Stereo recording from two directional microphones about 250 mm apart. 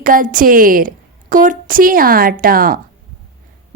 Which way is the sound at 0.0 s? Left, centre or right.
Right.